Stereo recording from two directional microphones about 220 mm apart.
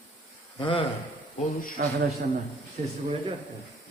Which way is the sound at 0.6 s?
20° left (ahead or behind).